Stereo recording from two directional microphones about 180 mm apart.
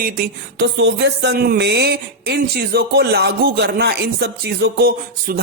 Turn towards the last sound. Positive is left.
turn(degrees=-60)  # may be behind; listen again after turning